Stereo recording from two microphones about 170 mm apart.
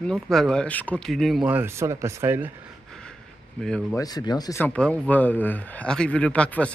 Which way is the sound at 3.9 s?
20° left (ahead or behind).